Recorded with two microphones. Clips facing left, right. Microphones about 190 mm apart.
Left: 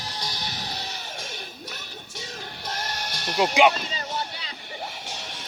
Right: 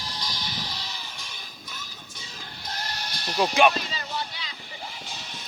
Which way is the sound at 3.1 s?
65° left (ahead or behind).